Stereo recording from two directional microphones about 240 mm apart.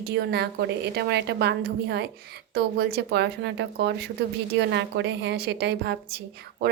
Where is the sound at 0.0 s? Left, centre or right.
Right.